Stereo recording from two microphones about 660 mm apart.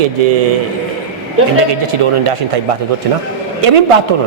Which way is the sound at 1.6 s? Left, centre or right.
Right.